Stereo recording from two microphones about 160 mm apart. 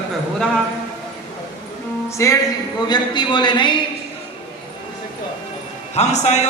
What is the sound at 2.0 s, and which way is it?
A man's voice, 20° left (ahead or behind).